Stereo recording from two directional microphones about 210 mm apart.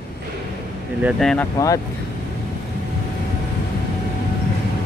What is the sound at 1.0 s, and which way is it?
Speech, 5° left (ahead or behind).